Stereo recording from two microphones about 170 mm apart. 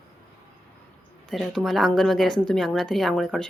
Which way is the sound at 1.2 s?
Centre (ahead or behind).